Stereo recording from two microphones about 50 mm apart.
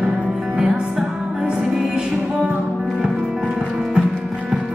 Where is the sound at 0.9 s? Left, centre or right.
Centre.